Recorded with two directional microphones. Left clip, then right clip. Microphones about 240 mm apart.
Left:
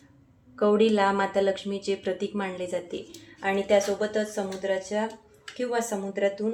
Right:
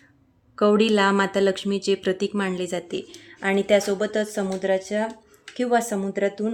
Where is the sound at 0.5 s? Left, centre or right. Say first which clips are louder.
Right 3 dB; right.